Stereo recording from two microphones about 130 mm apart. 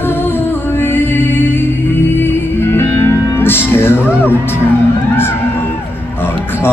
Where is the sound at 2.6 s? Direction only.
20° left (ahead or behind).